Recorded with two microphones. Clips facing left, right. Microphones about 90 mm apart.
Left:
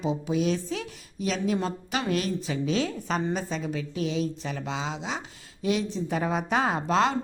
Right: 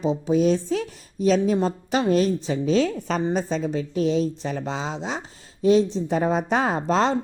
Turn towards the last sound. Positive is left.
turn(degrees=-35)  # may be behind; listen again after turning